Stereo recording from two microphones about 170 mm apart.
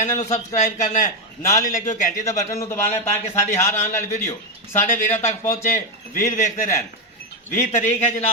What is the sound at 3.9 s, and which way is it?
A man's voice, 40° left (ahead or behind).